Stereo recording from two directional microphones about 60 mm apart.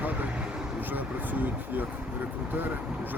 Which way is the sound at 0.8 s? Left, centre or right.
Right.